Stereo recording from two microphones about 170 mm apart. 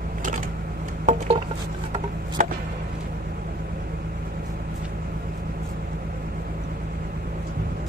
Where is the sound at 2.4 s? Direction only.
50° right (ahead or behind).